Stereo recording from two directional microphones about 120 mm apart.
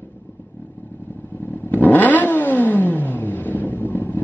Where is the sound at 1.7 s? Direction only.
15° left (ahead or behind).